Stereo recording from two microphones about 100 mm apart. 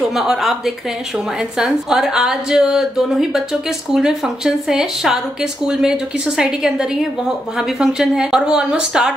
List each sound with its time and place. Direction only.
0.0 s speech: 5° right (ahead or behind)